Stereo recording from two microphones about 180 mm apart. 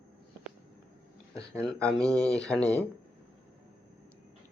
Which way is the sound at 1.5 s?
5° left (ahead or behind).